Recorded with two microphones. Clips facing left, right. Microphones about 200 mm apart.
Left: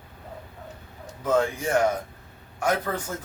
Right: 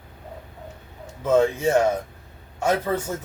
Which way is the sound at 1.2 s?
25° right (ahead or behind).